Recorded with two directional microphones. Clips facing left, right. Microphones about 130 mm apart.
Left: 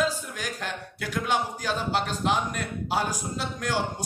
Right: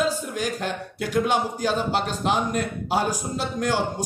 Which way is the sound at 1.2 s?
20° right (ahead or behind).